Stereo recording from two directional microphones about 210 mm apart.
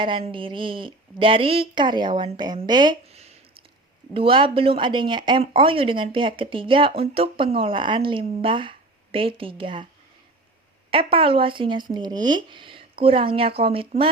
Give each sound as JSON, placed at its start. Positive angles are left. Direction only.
{"t": 0.3, "sound": "speech", "side_deg": -25}
{"t": 10.9, "sound": "speech", "side_deg": -25}